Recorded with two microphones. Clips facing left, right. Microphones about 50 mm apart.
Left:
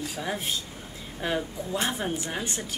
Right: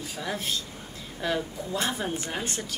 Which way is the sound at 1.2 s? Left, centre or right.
Left.